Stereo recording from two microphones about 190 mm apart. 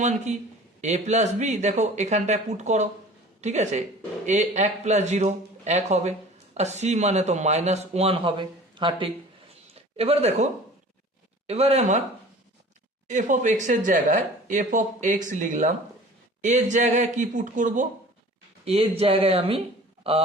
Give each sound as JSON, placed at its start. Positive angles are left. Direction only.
{"t": 0.0, "sound": "a man's voice", "side_deg": -40}
{"t": 13.1, "sound": "a man's voice", "side_deg": -40}
{"t": 18.6, "sound": "a man's voice", "side_deg": -30}